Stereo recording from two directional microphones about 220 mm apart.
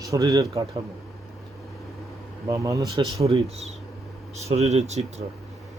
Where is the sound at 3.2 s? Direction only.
25° right (ahead or behind).